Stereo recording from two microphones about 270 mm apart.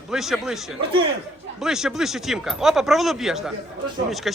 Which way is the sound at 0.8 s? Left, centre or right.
Centre.